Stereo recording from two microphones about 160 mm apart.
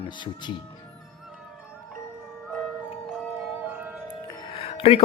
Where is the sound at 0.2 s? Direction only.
30° left (ahead or behind).